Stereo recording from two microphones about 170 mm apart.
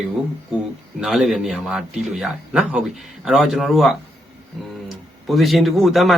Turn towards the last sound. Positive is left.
turn(degrees=0)  # may be behind; listen again after turning